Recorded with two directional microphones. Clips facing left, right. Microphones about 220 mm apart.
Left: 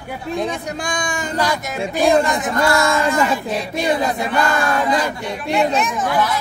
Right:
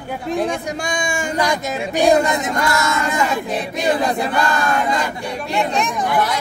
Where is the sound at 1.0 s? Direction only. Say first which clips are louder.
Right 2 dB; 10° right (ahead or behind).